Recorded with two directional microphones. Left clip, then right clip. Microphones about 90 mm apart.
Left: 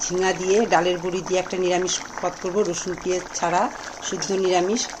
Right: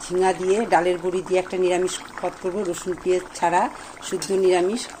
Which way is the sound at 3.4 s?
30° right (ahead or behind).